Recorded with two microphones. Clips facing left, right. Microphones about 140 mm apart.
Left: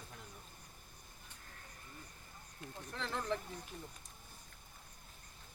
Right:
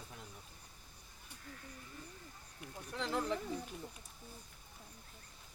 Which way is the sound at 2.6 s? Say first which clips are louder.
Right 2 dB; 15° right (ahead or behind).